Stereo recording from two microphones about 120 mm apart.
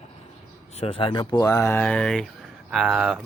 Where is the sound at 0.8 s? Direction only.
50° left (ahead or behind).